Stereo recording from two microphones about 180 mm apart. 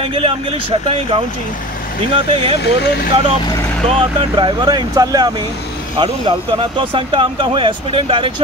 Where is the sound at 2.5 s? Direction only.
65° left (ahead or behind).